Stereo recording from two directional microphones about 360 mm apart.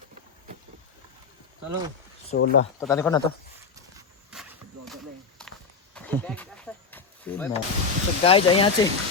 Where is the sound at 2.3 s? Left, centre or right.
Left.